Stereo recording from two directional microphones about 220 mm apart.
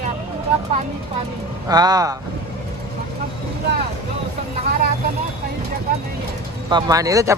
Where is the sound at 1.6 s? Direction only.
15° right (ahead or behind).